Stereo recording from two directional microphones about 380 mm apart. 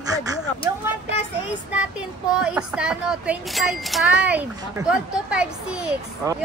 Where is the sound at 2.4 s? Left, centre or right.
Centre.